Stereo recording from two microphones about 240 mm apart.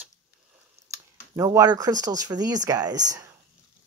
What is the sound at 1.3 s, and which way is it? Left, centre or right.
Speech, centre.